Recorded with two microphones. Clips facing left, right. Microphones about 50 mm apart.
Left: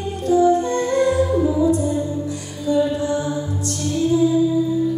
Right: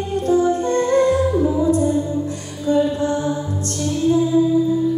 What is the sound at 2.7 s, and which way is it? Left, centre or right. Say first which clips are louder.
Music: right 1 dB; right.